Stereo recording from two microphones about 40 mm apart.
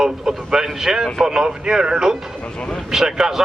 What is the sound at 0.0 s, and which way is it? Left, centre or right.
Speech, centre.